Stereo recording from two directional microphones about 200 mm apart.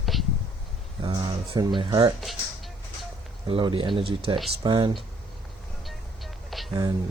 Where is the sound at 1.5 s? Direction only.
25° right (ahead or behind).